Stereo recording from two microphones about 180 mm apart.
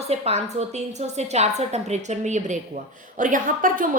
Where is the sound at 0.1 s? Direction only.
35° right (ahead or behind).